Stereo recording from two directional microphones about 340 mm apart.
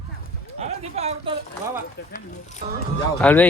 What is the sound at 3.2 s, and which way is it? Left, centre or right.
Speech, centre.